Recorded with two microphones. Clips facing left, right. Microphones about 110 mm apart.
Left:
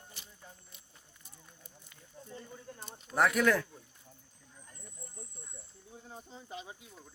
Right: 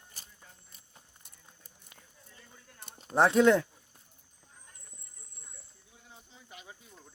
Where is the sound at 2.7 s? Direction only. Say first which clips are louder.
Left 10 dB; 35° left (ahead or behind).